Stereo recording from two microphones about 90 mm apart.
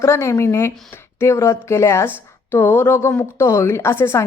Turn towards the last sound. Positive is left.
turn(degrees=30)  # may be behind; listen again after turning